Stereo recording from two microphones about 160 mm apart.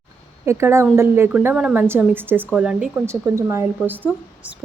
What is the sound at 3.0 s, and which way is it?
Speech, 15° right (ahead or behind).